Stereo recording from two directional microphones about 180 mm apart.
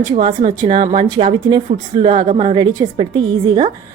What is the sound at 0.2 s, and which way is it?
Speech, 25° right (ahead or behind).